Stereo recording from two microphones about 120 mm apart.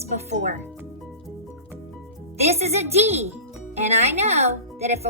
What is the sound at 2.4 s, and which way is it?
A woman's voice, 65° right (ahead or behind).